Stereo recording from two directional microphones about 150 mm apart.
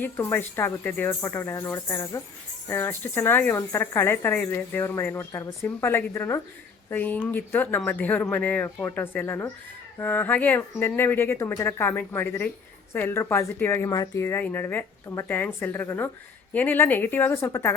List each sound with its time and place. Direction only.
0.0 s speech: 15° left (ahead or behind)